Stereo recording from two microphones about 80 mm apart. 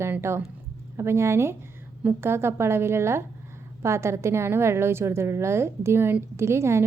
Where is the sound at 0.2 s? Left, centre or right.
Right.